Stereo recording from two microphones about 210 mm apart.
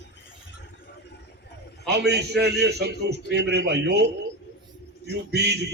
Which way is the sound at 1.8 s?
50° right (ahead or behind).